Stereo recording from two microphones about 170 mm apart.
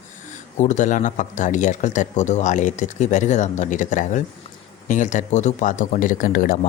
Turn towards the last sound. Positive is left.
turn(degrees=55)  # may be behind; listen again after turning